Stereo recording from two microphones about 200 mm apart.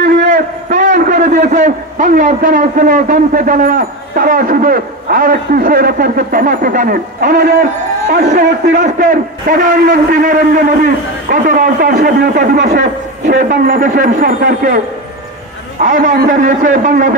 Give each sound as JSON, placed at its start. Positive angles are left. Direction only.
{"t": 0.0, "sound": "a sound", "side_deg": -55}
{"t": 0.7, "sound": "a man's voice", "side_deg": -40}
{"t": 15.8, "sound": "a man's voice", "side_deg": -40}